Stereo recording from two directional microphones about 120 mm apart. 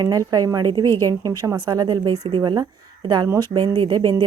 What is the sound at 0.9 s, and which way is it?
Speech, 20° left (ahead or behind).